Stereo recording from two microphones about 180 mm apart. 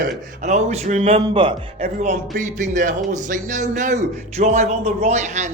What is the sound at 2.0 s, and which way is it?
A man's voice, 45° right (ahead or behind).